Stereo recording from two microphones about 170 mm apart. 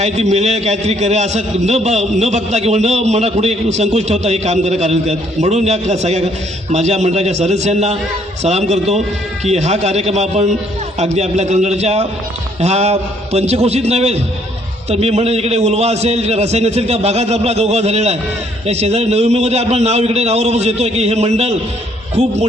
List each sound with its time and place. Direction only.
0.0 s a man's voice: 40° right (ahead or behind)